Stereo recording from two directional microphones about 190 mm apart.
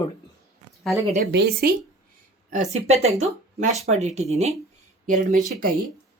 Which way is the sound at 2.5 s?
35° right (ahead or behind).